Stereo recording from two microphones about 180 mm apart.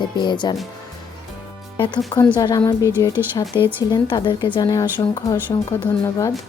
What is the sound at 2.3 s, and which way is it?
Speech, 20° left (ahead or behind).